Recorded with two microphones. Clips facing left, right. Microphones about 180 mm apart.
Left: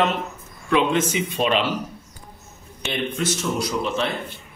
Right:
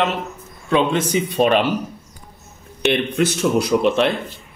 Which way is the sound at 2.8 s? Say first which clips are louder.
Right 7 dB; 65° right (ahead or behind).